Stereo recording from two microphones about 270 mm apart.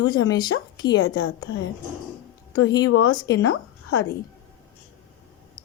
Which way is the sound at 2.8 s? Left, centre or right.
Left.